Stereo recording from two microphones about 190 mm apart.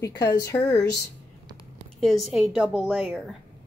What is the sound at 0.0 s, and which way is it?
Speech, 15° left (ahead or behind).